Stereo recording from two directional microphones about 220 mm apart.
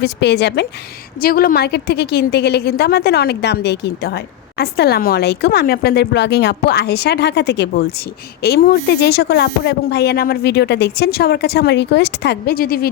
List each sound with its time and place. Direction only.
0.0 s a woman's voice: 50° left (ahead or behind)